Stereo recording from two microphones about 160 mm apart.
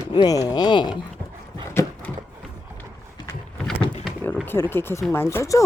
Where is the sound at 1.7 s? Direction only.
15° left (ahead or behind).